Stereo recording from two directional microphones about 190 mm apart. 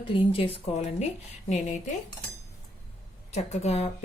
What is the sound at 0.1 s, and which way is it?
Speech, 30° left (ahead or behind).